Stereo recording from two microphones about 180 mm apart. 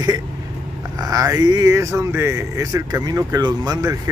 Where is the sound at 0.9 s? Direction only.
20° right (ahead or behind).